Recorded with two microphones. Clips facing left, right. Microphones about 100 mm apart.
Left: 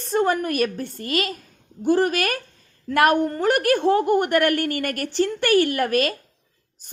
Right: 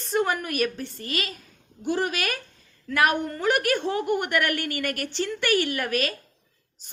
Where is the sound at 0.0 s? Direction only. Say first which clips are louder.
Left 4 dB; 40° left (ahead or behind).